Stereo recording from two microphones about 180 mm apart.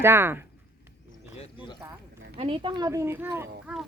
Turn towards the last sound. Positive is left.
turn(degrees=-10)  # may be behind; listen again after turning